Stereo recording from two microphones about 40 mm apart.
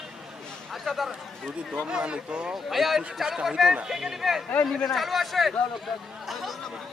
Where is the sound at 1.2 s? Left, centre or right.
Centre.